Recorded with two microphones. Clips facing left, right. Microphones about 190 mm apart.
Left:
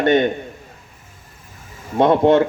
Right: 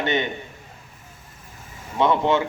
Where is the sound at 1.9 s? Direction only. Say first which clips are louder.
Left 7 dB; 50° left (ahead or behind).